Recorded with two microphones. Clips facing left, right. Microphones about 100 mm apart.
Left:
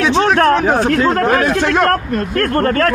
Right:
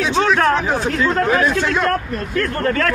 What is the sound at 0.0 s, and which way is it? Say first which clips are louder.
Speech: left 4 dB; 65° left (ahead or behind).